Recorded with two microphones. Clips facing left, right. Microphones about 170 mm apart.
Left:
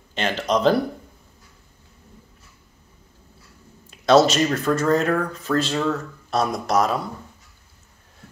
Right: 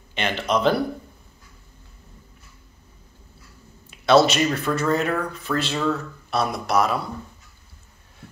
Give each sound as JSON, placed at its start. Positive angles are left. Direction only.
{"t": 0.1, "sound": "speech", "side_deg": 40}
{"t": 4.0, "sound": "speech", "side_deg": 45}